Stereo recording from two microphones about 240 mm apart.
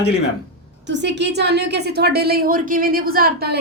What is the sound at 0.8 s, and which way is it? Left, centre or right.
A woman's voice, right.